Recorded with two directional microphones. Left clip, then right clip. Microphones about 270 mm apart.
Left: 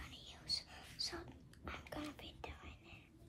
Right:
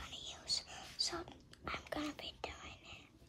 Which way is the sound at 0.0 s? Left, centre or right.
Right.